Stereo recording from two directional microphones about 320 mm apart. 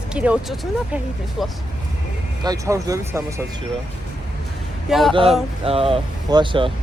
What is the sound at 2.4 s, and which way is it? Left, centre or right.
Speech, centre.